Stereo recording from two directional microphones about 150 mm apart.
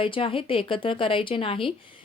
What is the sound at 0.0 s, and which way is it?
Speech, 35° left (ahead or behind).